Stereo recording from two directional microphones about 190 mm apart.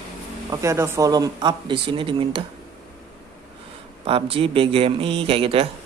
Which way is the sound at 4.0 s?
30° right (ahead or behind).